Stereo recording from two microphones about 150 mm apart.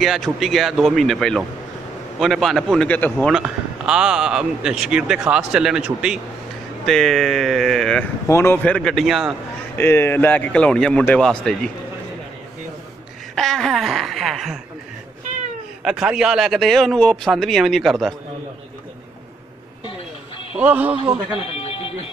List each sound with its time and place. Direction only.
0.0 s a man's voice: centre (ahead or behind)
3.3 s a man's voice: 5° right (ahead or behind)
8.3 s a man's voice: 15° left (ahead or behind); by 9.3 s centre (ahead or behind)
9.8 s a man's voice: 15° left (ahead or behind)
13.3 s a man's voice: 5° left (ahead or behind)
15.8 s a man's voice: 5° right (ahead or behind)
20.5 s a man's voice: 10° right (ahead or behind)
20.9 s a man's voice: 40° right (ahead or behind)
21.3 s music: 40° left (ahead or behind)